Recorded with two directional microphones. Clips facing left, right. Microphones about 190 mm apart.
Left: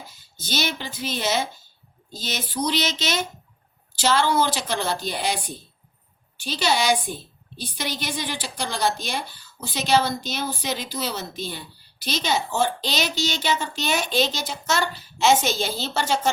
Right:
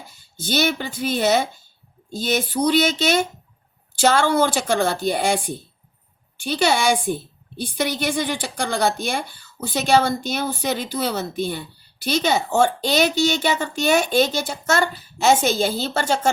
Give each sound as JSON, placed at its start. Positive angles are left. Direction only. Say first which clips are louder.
{"t": 0.4, "sound": "a woman's voice", "louder": "right 6 dB", "side_deg": -55}